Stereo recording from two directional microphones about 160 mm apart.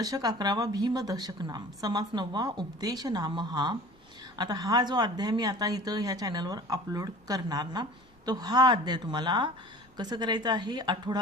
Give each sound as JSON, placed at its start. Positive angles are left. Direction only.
{"t": 0.0, "sound": "speech", "side_deg": -25}